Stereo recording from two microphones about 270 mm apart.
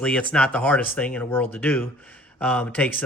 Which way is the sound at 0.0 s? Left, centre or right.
Centre.